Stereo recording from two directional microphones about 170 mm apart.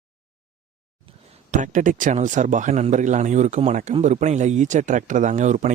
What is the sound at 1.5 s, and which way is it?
Speech, 45° right (ahead or behind).